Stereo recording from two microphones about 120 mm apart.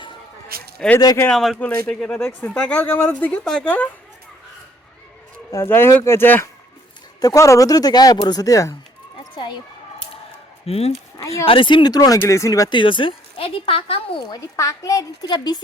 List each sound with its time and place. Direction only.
0.9 s speech: 25° left (ahead or behind)
1.3 s speech: 5° left (ahead or behind)
5.5 s speech: 20° left (ahead or behind)
7.2 s speech: 30° left (ahead or behind)
9.3 s speech: 40° left (ahead or behind)
10.7 s speech: 60° left (ahead or behind)
11.4 s speech: 45° left (ahead or behind); by 12.7 s 30° left (ahead or behind)
12.7 s speech: 45° left (ahead or behind)
14.3 s speech: 30° left (ahead or behind)